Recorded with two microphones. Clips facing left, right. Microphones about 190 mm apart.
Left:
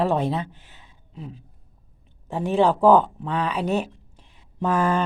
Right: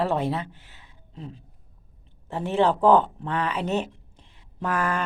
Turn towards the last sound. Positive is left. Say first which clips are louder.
# left 5 dB
turn(degrees=25)  # may be behind; listen again after turning